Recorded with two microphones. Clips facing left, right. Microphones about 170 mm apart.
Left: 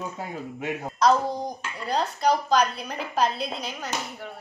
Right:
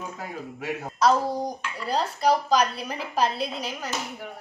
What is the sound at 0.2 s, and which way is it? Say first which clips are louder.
Speech: left 2 dB; 25° left (ahead or behind).